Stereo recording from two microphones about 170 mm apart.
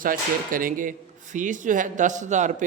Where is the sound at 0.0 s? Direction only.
55° right (ahead or behind).